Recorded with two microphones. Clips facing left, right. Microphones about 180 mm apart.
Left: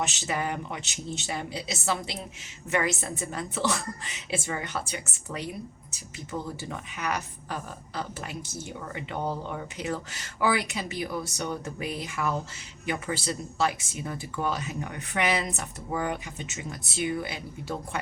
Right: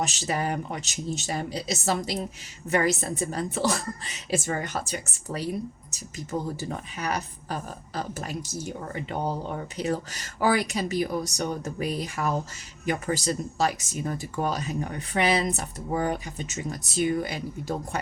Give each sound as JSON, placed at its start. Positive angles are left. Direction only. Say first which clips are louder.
{"t": 0.0, "sound": "a woman's voice", "louder": "right 2 dB", "side_deg": -35}
{"t": 6.6, "sound": "a woman's voice", "louder": "right 3 dB", "side_deg": -35}